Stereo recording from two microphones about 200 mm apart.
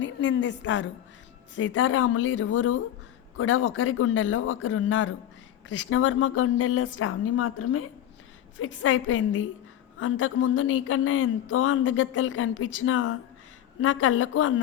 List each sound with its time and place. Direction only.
0.0 s a woman's voice: 65° left (ahead or behind)
1.5 s speech: 75° left (ahead or behind)